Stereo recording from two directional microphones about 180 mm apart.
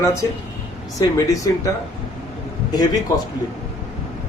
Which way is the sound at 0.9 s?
20° left (ahead or behind).